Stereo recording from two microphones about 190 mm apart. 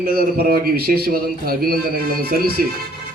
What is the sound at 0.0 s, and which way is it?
A man's voice, 50° right (ahead or behind).